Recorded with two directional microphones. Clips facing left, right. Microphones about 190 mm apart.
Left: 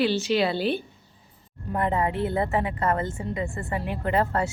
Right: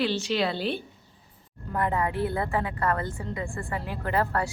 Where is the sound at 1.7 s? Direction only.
25° left (ahead or behind).